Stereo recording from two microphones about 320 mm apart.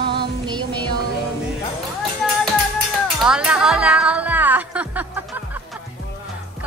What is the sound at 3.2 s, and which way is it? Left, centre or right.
Music, centre.